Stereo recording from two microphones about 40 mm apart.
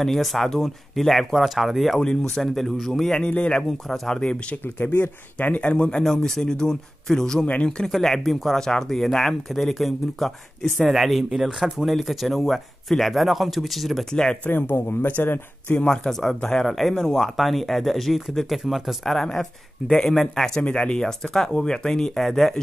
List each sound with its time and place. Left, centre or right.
0.0 s speech: centre
3.3 s a man's voice: left
3.6 s speech: centre
4.1 s speech: left
4.7 s speech: left
5.6 s speech: left
6.0 s speech: centre
14.1 s speech: centre
14.5 s speech: left
15.9 s speech: centre
16.3 s speech: left
16.6 s speech: centre
19.9 s speech: centre